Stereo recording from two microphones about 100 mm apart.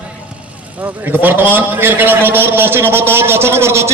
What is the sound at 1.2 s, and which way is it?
A man's voice, 20° right (ahead or behind).